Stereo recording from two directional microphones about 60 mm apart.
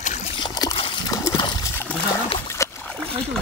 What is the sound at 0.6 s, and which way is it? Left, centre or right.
Splash, left.